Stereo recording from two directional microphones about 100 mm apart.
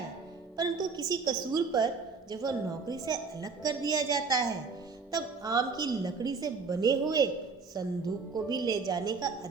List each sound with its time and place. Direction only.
0.5 s a woman's voice: 40° right (ahead or behind)